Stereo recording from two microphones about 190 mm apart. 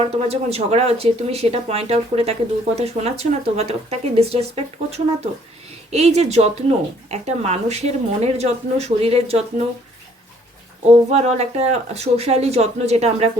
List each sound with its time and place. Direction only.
0.0 s speech: 35° right (ahead or behind)
11.1 s speech: 35° right (ahead or behind)